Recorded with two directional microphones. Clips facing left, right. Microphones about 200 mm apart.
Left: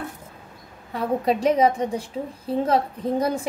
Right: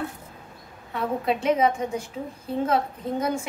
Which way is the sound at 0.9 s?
35° left (ahead or behind).